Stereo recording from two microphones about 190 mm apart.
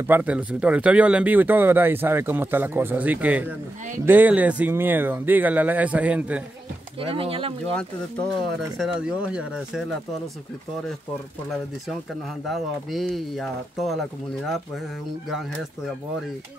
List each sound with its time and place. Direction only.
0.0 s speech: 10° right (ahead or behind)
7.0 s speech: 30° right (ahead or behind)
8.5 s speech: centre (ahead or behind)
12.4 s speech: centre (ahead or behind)